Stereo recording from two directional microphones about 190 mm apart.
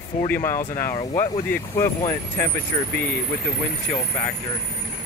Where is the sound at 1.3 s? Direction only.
15° left (ahead or behind).